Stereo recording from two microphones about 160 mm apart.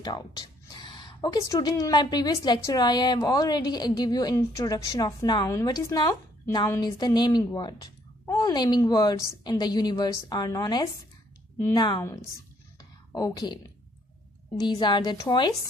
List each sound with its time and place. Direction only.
0.0 s a woman's voice: 25° left (ahead or behind)
13.1 s a woman's voice: 25° left (ahead or behind)
14.6 s a woman's voice: 30° left (ahead or behind)